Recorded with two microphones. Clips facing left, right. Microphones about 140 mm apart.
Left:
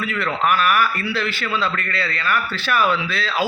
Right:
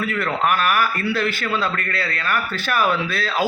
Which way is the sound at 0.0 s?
45° right (ahead or behind).